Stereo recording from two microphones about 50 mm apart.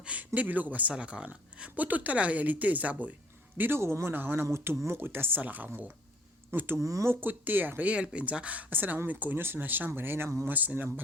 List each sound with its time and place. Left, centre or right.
0.0 s a sound: right
0.3 s speech: right
0.9 s speech: right
3.8 s speech: right
4.1 s speech: right
4.4 s speech: right
4.9 s speech: right
5.4 s speech: right
6.5 s speech: right
6.7 s speech: right
7.1 s speech: right
8.7 s speech: right
10.5 s speech: right